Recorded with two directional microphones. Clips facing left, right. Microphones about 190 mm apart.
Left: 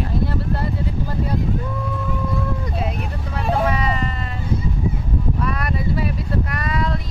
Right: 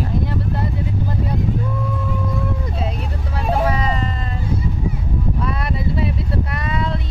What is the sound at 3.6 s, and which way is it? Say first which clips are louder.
Vehicle: right 1 dB; 35° right (ahead or behind).